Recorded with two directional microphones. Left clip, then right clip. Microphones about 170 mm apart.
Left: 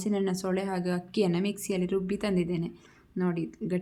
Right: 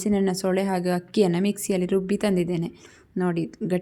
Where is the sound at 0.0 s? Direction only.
35° right (ahead or behind).